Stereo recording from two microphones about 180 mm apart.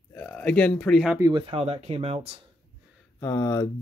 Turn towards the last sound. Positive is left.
turn(degrees=15)  # may be behind; listen again after turning